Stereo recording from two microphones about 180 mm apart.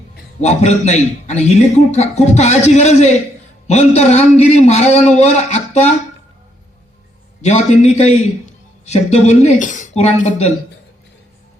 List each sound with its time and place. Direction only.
0.4 s a man's voice: 40° left (ahead or behind)
7.4 s a man's voice: 40° left (ahead or behind)